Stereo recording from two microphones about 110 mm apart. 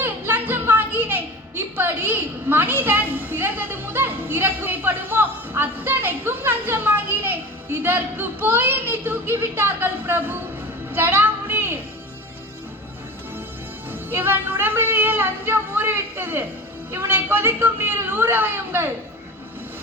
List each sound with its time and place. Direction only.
0.0 s a sound: 20° right (ahead or behind)
13.9 s music: 20° right (ahead or behind)
16.9 s a woman's voice: 20° right (ahead or behind)